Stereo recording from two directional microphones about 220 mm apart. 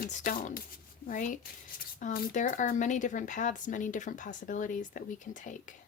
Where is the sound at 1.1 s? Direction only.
35° left (ahead or behind).